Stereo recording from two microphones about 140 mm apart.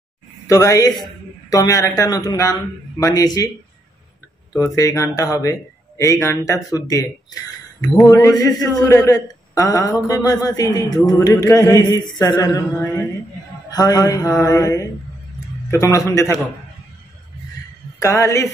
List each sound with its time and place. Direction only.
0.5 s a man's voice: 25° left (ahead or behind)
4.5 s a man's voice: 25° left (ahead or behind)
17.9 s a man's voice: 20° left (ahead or behind)